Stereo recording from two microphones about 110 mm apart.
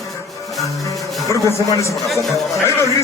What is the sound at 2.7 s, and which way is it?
Speech, 25° left (ahead or behind).